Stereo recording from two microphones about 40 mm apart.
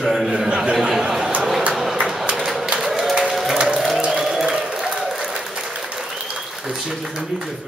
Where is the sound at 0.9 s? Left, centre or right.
Centre.